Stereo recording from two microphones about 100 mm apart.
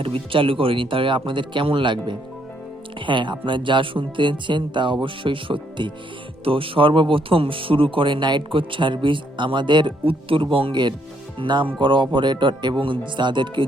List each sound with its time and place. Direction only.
0.0 s speech: 60° right (ahead or behind)